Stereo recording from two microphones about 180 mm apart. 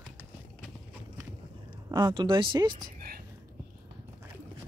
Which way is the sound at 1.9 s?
25° right (ahead or behind).